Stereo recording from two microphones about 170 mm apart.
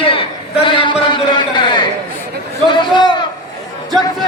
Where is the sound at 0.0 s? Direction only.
30° left (ahead or behind).